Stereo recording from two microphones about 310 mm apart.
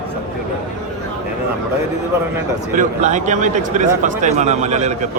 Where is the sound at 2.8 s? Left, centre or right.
Right.